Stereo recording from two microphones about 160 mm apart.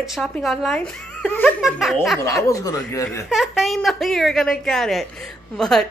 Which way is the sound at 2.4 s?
20° left (ahead or behind).